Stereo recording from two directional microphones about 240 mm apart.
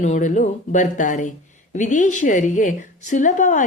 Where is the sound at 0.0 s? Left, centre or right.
Left.